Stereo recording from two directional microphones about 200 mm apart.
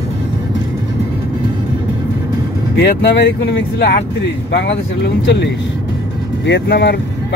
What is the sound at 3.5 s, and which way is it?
Speech, 55° left (ahead or behind).